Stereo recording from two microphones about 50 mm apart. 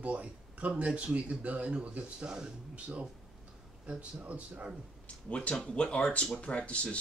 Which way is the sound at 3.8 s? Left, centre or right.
Right.